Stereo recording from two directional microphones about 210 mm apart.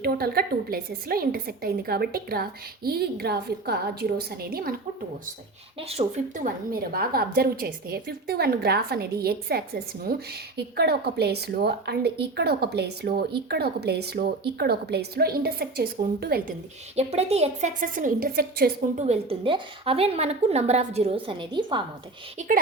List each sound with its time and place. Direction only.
0.0 s a woman's voice: 45° right (ahead or behind)
5.9 s a woman's voice: 35° right (ahead or behind)
16.9 s a woman's voice: 30° right (ahead or behind); by 18.9 s 45° right (ahead or behind)
18.9 s a woman's voice: 30° right (ahead or behind)
22.4 s a woman's voice: 40° right (ahead or behind)